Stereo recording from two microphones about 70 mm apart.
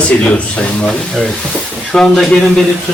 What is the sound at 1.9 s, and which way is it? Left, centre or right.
Speech, centre.